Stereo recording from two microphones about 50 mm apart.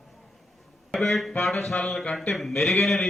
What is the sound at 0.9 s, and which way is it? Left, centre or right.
A man's voice, centre.